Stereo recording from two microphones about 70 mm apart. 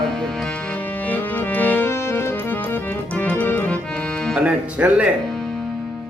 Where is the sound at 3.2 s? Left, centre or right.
Left.